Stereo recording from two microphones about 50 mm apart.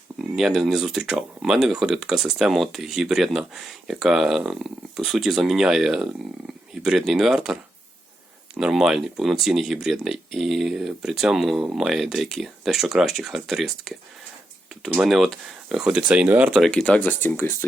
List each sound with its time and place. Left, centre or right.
0.2 s speech: centre
15.0 s speech: centre
15.8 s speech: centre
16.8 s speech: left
17.2 s speech: left